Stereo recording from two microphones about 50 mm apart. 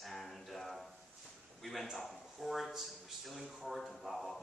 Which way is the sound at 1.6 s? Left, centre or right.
Centre.